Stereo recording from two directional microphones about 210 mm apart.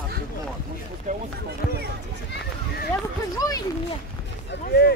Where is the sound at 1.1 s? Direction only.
35° right (ahead or behind).